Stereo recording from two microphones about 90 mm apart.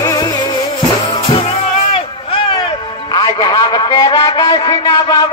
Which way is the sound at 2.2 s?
80° left.